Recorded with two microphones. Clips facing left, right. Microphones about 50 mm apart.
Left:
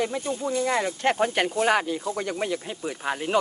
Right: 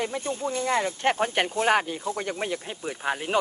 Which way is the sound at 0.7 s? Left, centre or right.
Left.